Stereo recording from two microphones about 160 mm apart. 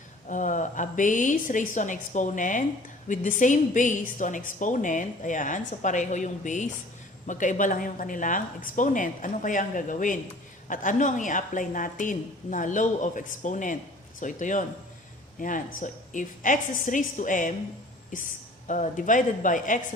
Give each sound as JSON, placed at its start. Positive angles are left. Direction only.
{"t": 0.3, "sound": "a woman's voice", "side_deg": 50}